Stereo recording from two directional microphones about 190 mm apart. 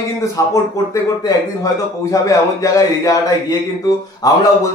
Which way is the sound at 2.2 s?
15° left (ahead or behind).